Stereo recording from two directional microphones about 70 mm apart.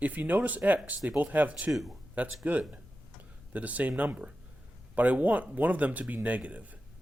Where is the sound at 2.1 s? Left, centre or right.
Right.